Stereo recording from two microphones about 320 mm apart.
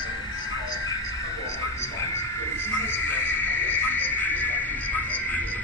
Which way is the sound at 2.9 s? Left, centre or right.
Centre.